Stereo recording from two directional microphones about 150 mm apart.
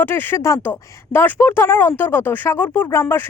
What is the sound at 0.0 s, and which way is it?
A woman's voice, 15° left (ahead or behind).